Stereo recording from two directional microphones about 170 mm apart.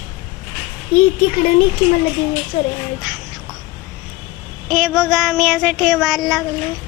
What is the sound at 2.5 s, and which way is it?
Speech, 45° left (ahead or behind).